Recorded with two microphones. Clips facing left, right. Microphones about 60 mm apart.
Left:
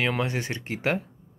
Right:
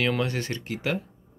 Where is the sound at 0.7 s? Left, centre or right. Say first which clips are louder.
Left 3 dB; left.